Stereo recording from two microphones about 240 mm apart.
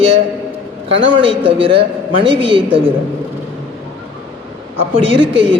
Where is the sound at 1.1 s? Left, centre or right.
Right.